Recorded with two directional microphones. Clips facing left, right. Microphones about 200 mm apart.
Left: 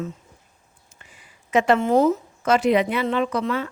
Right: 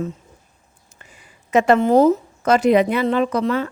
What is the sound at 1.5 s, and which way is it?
A woman's voice, 45° right (ahead or behind).